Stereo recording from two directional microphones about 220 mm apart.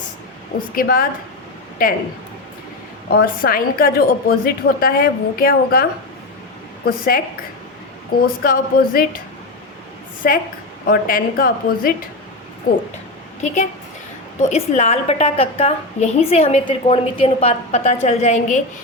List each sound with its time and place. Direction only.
0.8 s a woman's voice: 40° left (ahead or behind)
3.1 s a woman's voice: 45° left (ahead or behind)
6.8 s a woman's voice: 40° left (ahead or behind)
8.4 s a woman's voice: 40° left (ahead or behind)
10.2 s a woman's voice: 40° left (ahead or behind)